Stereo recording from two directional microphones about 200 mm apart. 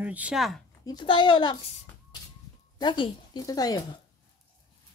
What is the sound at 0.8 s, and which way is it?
Speech, 25° left (ahead or behind).